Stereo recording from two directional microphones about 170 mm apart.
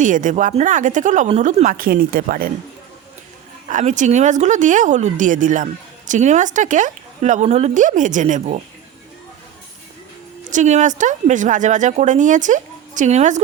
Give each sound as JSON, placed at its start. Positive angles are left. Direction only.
{"t": 0.0, "sound": "a woman's voice", "side_deg": -50}
{"t": 3.7, "sound": "a woman's voice", "side_deg": -45}
{"t": 10.5, "sound": "a woman's voice", "side_deg": -45}